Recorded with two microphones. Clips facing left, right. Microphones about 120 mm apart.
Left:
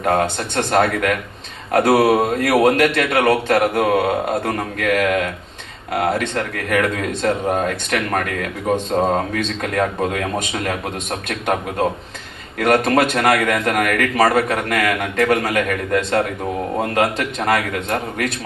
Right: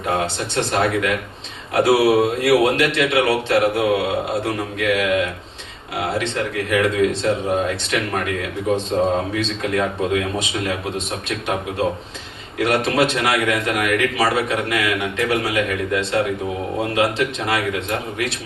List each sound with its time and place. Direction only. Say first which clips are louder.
0.0 s a man's voice: left 4 dB; 50° left (ahead or behind)
12.5 s a man's voice: left 3 dB; 50° left (ahead or behind)